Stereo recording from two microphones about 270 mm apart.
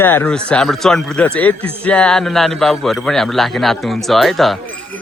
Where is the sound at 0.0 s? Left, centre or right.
Centre.